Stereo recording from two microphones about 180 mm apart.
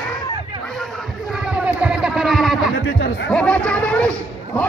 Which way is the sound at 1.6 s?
5° right (ahead or behind).